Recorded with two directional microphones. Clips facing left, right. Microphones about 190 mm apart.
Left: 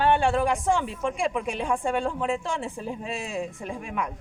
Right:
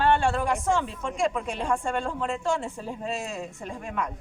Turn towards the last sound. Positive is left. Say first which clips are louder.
# left 1 dB
turn(degrees=10)  # may be behind; listen again after turning